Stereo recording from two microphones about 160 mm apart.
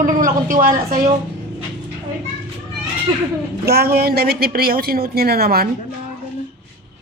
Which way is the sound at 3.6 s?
75° right (ahead or behind).